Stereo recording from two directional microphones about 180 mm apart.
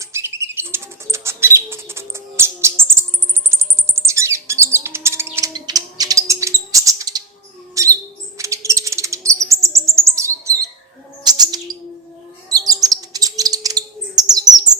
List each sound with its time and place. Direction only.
0.0 s bird: 15° right (ahead or behind)
3.5 s music: 15° right (ahead or behind)
7.8 s a sound: 20° right (ahead or behind)
8.4 s chirp: 15° right (ahead or behind)
11.2 s bird: 20° right (ahead or behind)